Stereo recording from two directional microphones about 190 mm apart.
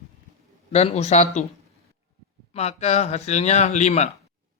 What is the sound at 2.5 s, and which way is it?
Speech, 35° left (ahead or behind).